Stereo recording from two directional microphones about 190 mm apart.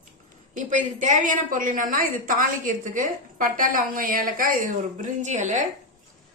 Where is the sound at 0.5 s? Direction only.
40° right (ahead or behind).